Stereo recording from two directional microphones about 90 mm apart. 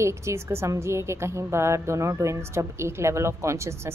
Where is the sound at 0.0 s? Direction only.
30° right (ahead or behind).